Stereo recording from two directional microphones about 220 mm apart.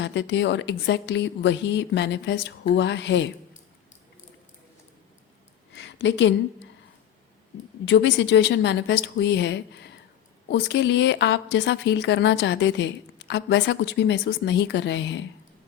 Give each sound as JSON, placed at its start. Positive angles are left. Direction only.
{"t": 0.0, "sound": "a woman's voice", "side_deg": 50}
{"t": 5.7, "sound": "a sound", "side_deg": 55}
{"t": 7.9, "sound": "a woman's voice", "side_deg": 55}